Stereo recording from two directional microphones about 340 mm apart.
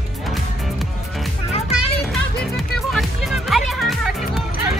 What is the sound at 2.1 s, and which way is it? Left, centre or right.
Music, centre.